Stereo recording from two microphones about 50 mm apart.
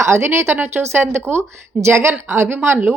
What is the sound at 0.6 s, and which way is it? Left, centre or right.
Speech, right.